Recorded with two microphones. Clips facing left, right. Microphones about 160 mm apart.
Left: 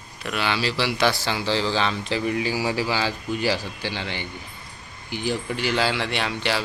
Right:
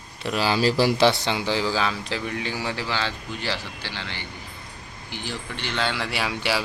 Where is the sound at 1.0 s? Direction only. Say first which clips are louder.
Right 3 dB; 20° right (ahead or behind).